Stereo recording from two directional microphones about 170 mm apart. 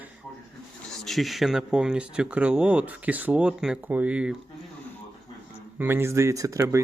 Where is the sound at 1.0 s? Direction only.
Centre (ahead or behind).